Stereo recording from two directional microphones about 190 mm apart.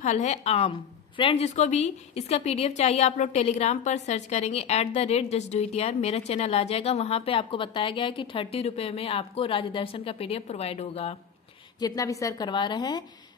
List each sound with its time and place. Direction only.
0.0 s a woman's voice: 35° left (ahead or behind)
11.8 s a woman's voice: 20° left (ahead or behind)